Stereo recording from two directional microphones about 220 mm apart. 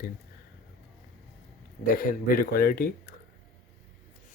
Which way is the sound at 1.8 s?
40° left (ahead or behind).